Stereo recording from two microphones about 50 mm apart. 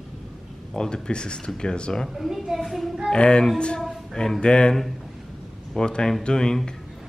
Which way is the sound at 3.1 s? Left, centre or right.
Centre.